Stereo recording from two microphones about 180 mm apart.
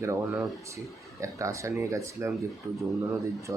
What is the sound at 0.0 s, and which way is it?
Speech, 15° right (ahead or behind).